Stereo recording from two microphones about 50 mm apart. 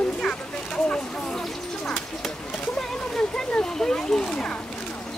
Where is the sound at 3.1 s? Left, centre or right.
Centre.